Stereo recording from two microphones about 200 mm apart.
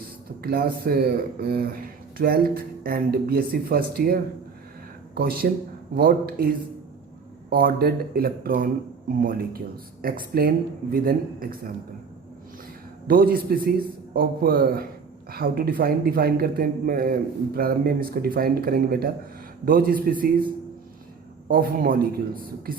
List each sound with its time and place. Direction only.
0.4 s a man's voice: 50° right (ahead or behind)
7.5 s a man's voice: 50° right (ahead or behind)
13.1 s a man's voice: 45° right (ahead or behind)
21.4 s a man's voice: 45° right (ahead or behind)